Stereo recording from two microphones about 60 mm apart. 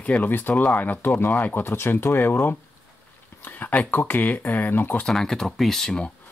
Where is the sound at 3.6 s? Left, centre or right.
Left.